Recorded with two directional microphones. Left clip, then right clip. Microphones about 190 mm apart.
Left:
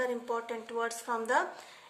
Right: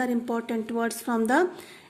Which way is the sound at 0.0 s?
50° right (ahead or behind).